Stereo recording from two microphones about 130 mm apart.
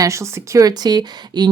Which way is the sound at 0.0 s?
20° right (ahead or behind).